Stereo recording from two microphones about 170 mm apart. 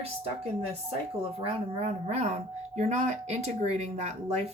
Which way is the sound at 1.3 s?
35° right (ahead or behind).